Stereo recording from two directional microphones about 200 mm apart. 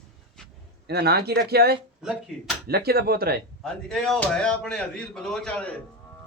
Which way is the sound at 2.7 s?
50° right (ahead or behind).